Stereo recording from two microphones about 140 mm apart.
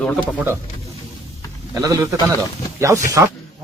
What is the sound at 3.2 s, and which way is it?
Speech, 20° right (ahead or behind).